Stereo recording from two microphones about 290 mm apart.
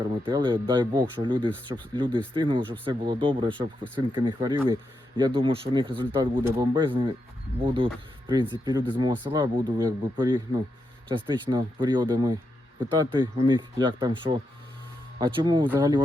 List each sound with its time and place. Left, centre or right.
0.3 s speech: centre